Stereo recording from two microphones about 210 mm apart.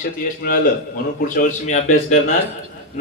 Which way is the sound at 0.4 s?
45° left (ahead or behind).